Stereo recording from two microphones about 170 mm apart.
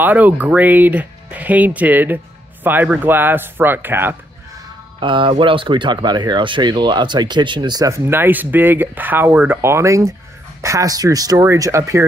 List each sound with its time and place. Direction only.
0.0 s speech: 10° right (ahead or behind)
5.0 s speech: 30° right (ahead or behind)